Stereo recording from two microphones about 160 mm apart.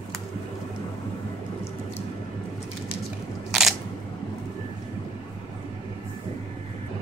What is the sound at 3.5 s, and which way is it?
Single-lens reflex camera, centre (ahead or behind).